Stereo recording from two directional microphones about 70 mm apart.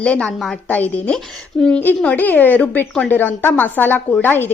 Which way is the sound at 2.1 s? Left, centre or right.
Left.